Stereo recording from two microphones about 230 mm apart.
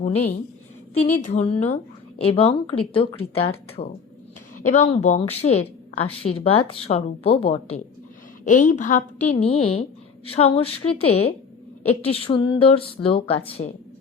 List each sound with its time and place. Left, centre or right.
0.0 s a woman's voice: left